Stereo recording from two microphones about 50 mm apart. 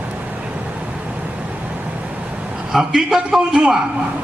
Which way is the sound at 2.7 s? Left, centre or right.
Centre.